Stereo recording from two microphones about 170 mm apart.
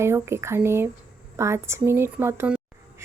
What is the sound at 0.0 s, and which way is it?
A woman's voice, 15° right (ahead or behind).